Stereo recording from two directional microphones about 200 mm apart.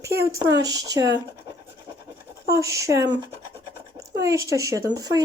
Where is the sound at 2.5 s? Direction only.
15° right (ahead or behind).